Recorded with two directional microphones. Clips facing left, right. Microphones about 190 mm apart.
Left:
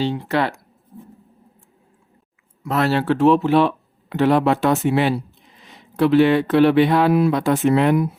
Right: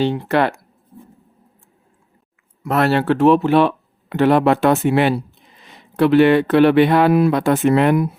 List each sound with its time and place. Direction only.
0.0 s speech: 60° right (ahead or behind)
2.6 s speech: 60° right (ahead or behind)